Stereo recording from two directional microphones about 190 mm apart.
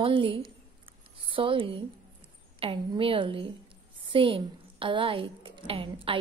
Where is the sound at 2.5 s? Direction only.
30° right (ahead or behind).